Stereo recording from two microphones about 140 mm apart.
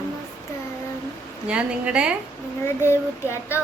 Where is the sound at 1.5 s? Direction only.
10° right (ahead or behind).